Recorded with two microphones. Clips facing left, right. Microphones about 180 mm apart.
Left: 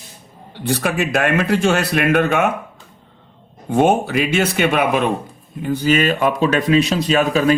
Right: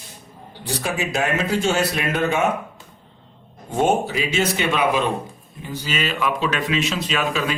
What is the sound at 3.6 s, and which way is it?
Speech, 60° left (ahead or behind).